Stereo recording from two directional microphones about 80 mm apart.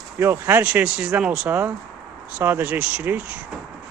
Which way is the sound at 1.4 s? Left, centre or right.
Right.